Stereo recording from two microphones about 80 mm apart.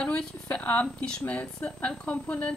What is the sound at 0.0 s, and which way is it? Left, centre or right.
A woman's voice, centre.